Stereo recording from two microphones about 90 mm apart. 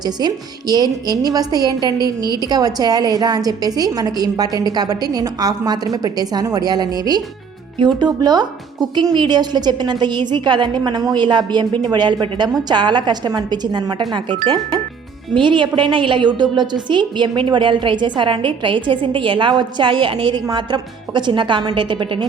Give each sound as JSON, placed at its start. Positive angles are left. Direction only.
{"t": 0.0, "sound": "a woman's voice", "side_deg": -50}